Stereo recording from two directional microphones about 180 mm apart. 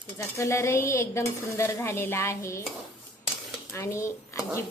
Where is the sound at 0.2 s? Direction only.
15° left (ahead or behind).